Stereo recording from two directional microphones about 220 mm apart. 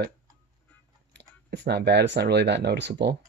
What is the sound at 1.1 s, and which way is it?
Speech, 50° right (ahead or behind).